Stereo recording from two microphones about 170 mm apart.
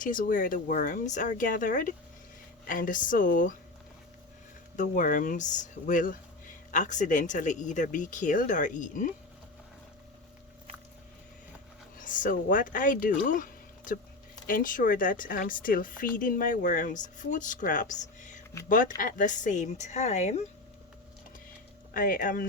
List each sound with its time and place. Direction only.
0.0 s speech: 50° left (ahead or behind)
4.8 s speech: 50° left (ahead or behind)
11.9 s speech: 50° left (ahead or behind)
21.9 s speech: 55° left (ahead or behind)